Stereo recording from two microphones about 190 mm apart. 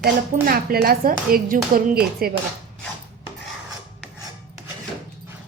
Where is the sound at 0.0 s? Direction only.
50° right (ahead or behind).